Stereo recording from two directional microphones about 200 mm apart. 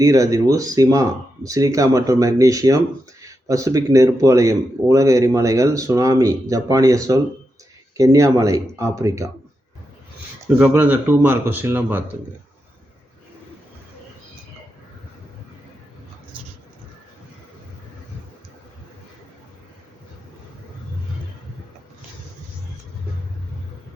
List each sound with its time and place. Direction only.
0.0 s speech: 15° right (ahead or behind)
10.6 s speech: 10° right (ahead or behind)